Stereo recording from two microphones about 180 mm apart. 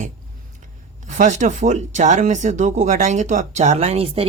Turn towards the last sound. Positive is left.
turn(degrees=-35)  # may be behind; listen again after turning